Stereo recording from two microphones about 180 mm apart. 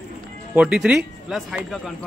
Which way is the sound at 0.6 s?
5° right (ahead or behind).